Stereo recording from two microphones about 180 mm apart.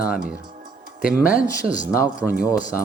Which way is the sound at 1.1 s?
10° right (ahead or behind).